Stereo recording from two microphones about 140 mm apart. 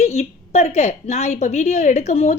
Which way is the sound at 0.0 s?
50° left (ahead or behind).